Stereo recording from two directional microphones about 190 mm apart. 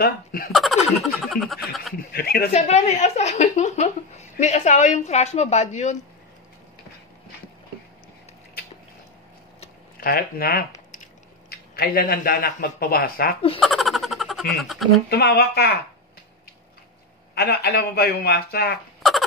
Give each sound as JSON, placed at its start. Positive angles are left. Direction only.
{"t": 0.0, "sound": "speech", "side_deg": 50}
{"t": 0.5, "sound": "speech", "side_deg": 0}
{"t": 2.1, "sound": "speech", "side_deg": 55}
{"t": 2.5, "sound": "a woman's voice", "side_deg": 35}
{"t": 9.9, "sound": "speech", "side_deg": 50}
{"t": 13.6, "sound": "a sound", "side_deg": 0}
{"t": 15.0, "sound": "a man's voice", "side_deg": 55}
{"t": 17.4, "sound": "a man's voice", "side_deg": 60}
{"t": 19.0, "sound": "a sound", "side_deg": 0}